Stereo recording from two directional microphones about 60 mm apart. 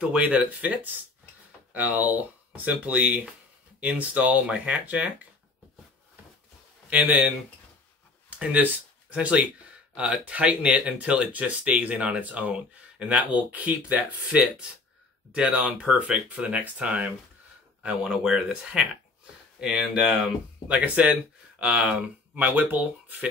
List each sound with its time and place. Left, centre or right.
0.1 s speech: right
6.9 s speech: right
8.4 s speech: right
20.2 s speech: right